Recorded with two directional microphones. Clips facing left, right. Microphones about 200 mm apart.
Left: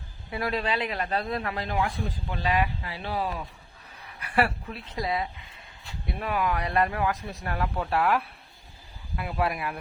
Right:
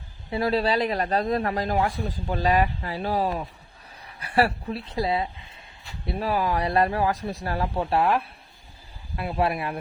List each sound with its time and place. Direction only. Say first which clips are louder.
0.3 s speech: right 6 dB; 30° right (ahead or behind)